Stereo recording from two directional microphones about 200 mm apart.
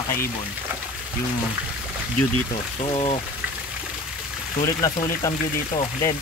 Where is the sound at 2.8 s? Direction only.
25° left (ahead or behind).